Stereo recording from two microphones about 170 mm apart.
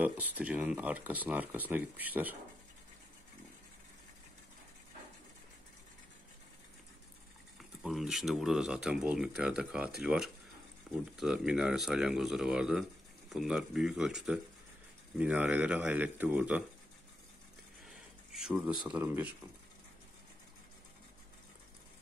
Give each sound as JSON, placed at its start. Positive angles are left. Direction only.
{"t": 0.0, "sound": "speech", "side_deg": -10}
{"t": 7.8, "sound": "speech", "side_deg": 0}
{"t": 17.8, "sound": "a sound", "side_deg": 0}
{"t": 18.9, "sound": "speech", "side_deg": -5}